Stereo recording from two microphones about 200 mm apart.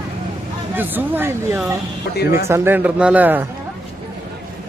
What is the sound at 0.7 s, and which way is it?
Speech, 10° right (ahead or behind).